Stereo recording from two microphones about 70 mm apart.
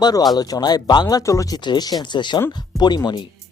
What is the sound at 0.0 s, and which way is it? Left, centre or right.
Speech, left.